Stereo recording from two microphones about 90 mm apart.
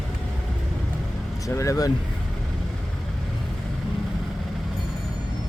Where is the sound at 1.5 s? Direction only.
35° left (ahead or behind).